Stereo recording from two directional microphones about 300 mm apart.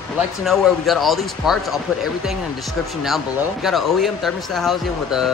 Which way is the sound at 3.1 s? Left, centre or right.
Centre.